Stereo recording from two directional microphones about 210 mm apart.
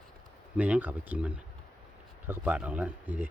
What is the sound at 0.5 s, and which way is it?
A man's voice, 5° right (ahead or behind).